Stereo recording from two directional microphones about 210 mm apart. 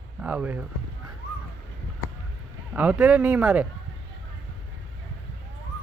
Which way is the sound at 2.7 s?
5° right (ahead or behind).